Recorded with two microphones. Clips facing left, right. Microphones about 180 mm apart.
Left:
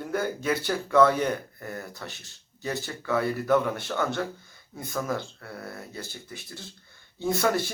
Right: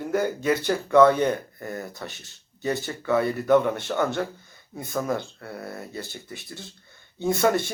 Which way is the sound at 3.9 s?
20° right (ahead or behind).